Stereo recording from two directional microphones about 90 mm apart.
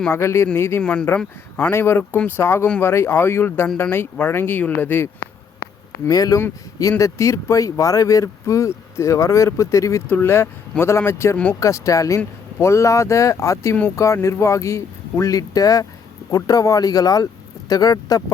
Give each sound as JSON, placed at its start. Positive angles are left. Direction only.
{"t": 0.1, "sound": "speech", "side_deg": 30}
{"t": 0.8, "sound": "speech", "side_deg": 10}
{"t": 1.7, "sound": "speech", "side_deg": 25}
{"t": 6.1, "sound": "speech", "side_deg": 40}
{"t": 10.1, "sound": "speech", "side_deg": 25}